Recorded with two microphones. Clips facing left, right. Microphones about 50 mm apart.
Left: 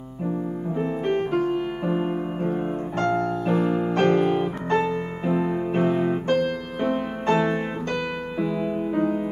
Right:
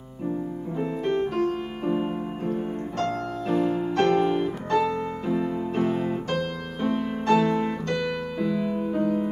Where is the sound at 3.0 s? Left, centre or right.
Left.